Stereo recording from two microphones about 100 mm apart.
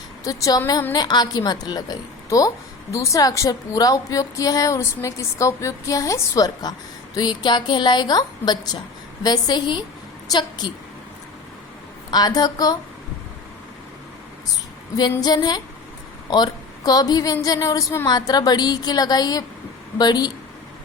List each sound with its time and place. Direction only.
0.3 s a woman's voice: 35° left (ahead or behind)
12.1 s a woman's voice: 40° left (ahead or behind)
15.2 s a woman's voice: 40° left (ahead or behind)